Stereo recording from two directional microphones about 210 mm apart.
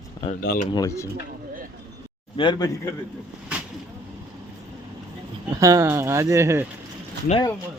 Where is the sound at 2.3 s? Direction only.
20° left (ahead or behind).